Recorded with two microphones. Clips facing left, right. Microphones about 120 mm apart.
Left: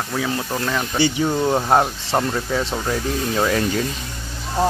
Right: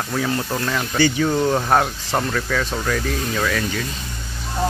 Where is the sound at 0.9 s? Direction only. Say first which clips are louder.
Right 2 dB; 20° left (ahead or behind).